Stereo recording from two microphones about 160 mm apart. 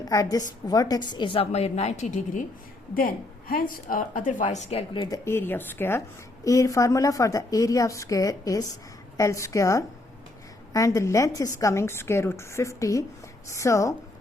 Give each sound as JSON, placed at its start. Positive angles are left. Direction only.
{"t": 0.0, "sound": "a woman's voice", "side_deg": 20}
{"t": 2.9, "sound": "a woman's voice", "side_deg": 65}
{"t": 5.1, "sound": "a woman's voice", "side_deg": 15}